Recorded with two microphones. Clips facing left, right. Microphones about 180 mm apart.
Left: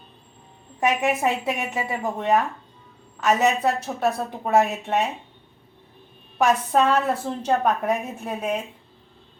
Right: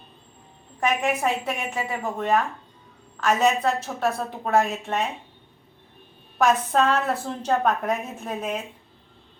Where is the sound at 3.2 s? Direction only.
5° left (ahead or behind).